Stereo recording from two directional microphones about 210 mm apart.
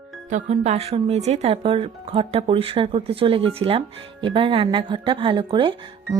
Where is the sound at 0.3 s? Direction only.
35° right (ahead or behind).